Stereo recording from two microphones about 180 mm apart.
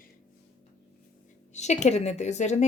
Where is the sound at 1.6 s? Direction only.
40° left (ahead or behind).